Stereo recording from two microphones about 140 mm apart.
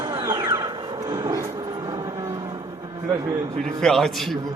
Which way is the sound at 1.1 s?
30° right (ahead or behind).